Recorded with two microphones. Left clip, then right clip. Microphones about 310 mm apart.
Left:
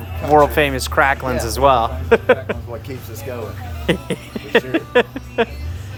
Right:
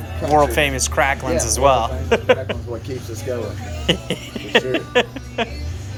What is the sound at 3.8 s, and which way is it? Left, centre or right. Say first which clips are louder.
Speech: even; centre.